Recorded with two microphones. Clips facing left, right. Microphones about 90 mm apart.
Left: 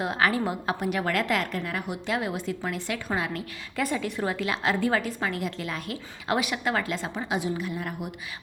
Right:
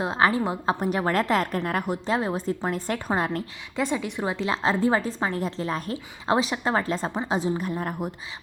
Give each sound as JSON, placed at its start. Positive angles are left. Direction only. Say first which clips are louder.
{"t": 0.0, "sound": "a woman's voice", "louder": "right 3 dB", "side_deg": -25}
{"t": 3.8, "sound": "a woman's voice", "louder": "right 1 dB", "side_deg": -20}